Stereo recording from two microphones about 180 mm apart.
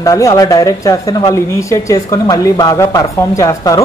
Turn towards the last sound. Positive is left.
turn(degrees=20)  # may be behind; listen again after turning